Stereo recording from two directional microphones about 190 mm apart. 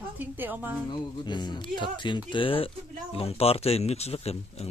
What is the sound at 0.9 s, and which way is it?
Speech, 25° left (ahead or behind).